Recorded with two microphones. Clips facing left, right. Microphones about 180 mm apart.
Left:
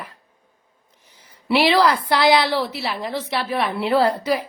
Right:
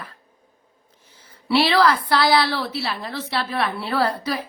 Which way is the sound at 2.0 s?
20° left (ahead or behind).